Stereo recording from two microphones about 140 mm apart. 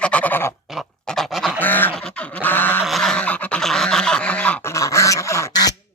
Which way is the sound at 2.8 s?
Centre (ahead or behind).